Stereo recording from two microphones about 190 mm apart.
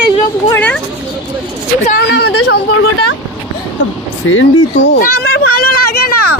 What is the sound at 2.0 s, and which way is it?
Speech, 60° left (ahead or behind).